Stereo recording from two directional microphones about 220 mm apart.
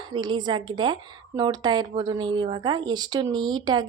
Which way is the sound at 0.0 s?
20° right (ahead or behind).